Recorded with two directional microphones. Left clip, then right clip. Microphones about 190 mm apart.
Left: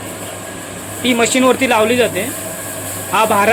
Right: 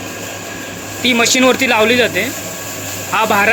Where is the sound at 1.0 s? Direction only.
Centre (ahead or behind).